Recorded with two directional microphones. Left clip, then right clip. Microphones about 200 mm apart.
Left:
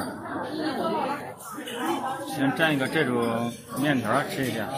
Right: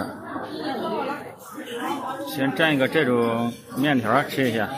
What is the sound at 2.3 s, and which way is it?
Speech, 30° right (ahead or behind).